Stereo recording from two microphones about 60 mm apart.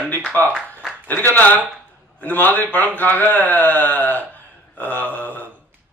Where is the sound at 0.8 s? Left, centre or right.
Centre.